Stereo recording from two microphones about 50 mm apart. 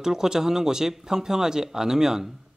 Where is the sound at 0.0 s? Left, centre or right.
Centre.